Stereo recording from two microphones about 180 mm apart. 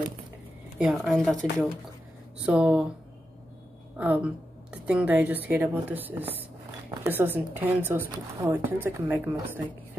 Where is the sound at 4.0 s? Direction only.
5° right (ahead or behind).